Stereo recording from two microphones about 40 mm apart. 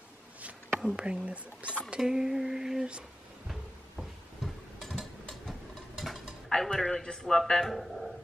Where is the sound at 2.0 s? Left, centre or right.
Centre.